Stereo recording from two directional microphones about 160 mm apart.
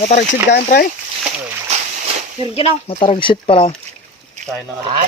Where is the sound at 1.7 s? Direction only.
40° right (ahead or behind).